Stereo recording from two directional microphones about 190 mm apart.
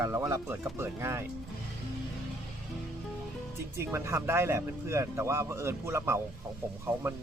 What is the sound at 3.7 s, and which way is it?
Speech, 15° right (ahead or behind).